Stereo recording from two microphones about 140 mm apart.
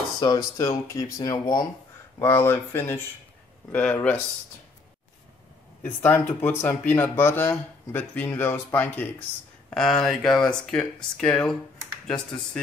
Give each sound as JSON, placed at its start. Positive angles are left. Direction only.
{"t": 0.2, "sound": "speech", "side_deg": 30}
{"t": 2.1, "sound": "speech", "side_deg": 15}
{"t": 6.0, "sound": "speech", "side_deg": 15}